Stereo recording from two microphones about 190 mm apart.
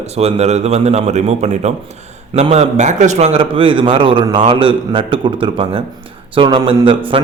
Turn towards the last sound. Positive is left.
turn(degrees=-25)  # may be behind; listen again after turning